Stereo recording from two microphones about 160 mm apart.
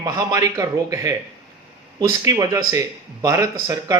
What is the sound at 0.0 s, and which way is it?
A man's voice, 20° right (ahead or behind).